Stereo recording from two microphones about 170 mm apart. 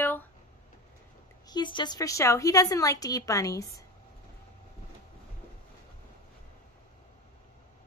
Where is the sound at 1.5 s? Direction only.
25° left (ahead or behind).